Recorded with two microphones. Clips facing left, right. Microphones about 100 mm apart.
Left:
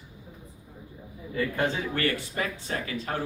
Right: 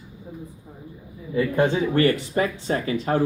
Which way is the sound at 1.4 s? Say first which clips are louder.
Right 7 dB; 25° right (ahead or behind).